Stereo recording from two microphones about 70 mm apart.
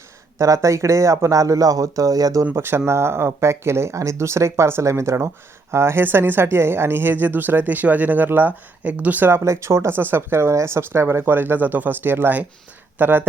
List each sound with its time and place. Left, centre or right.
0.3 s speech: right
2.5 s speech: right
9.3 s speech: right